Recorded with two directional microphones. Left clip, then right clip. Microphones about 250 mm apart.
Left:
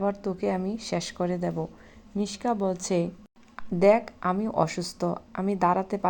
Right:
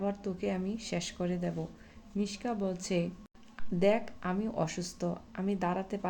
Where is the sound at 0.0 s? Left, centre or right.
Centre.